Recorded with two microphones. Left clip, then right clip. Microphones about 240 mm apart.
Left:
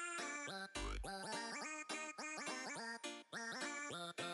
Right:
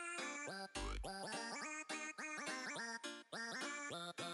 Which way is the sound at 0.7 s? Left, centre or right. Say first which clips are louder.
Even; left.